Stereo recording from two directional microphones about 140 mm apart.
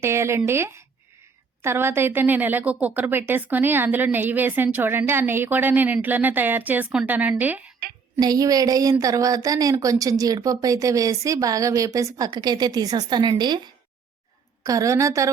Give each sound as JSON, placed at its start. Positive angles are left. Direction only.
{"t": 0.0, "sound": "a woman's voice", "side_deg": -20}
{"t": 8.2, "sound": "a woman's voice", "side_deg": -25}
{"t": 14.6, "sound": "a woman's voice", "side_deg": -25}